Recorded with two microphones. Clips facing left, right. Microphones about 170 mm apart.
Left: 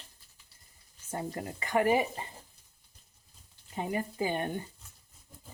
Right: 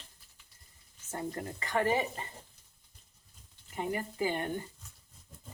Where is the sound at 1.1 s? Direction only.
15° left (ahead or behind).